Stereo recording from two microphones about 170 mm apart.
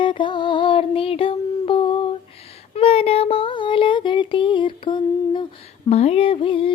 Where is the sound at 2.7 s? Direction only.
35° left (ahead or behind).